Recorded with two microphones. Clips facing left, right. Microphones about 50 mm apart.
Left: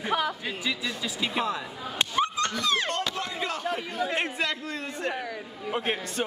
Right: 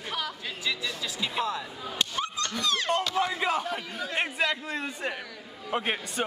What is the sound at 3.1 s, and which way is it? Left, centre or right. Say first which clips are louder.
Speech: right 5 dB; centre.